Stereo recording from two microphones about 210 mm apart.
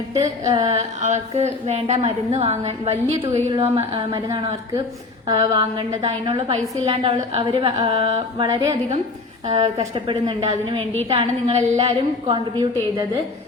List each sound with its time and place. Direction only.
0.4 s a woman's voice: 30° right (ahead or behind)
3.8 s a woman's voice: 20° right (ahead or behind)
5.3 s a woman's voice: 20° right (ahead or behind)